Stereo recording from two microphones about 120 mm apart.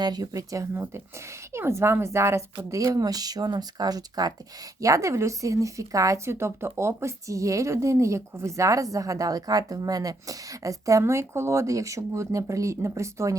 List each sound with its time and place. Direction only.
0.0 s a woman's voice: 35° right (ahead or behind)